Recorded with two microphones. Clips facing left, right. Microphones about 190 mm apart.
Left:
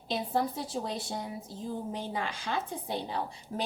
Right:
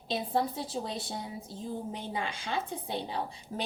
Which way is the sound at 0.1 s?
25° right (ahead or behind).